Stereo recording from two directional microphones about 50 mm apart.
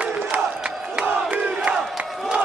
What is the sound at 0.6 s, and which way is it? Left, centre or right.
Crowd, centre.